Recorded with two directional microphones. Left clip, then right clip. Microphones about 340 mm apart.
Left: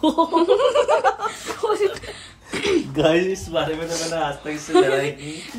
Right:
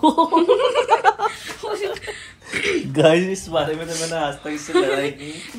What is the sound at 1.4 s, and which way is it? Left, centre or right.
Speech, centre.